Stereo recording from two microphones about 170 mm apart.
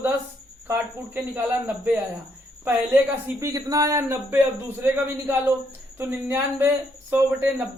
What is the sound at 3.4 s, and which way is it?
A man's voice, 20° right (ahead or behind).